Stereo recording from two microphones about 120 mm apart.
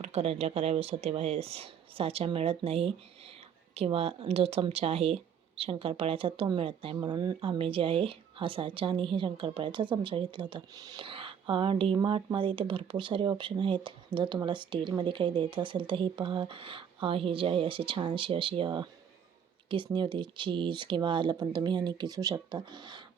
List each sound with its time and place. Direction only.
0.0 s speech: 55° right (ahead or behind)
6.9 s speech: 35° right (ahead or behind)
11.0 s speech: 45° right (ahead or behind)